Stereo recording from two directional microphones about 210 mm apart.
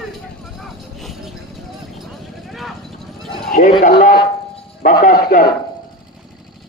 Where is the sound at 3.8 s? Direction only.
40° left (ahead or behind).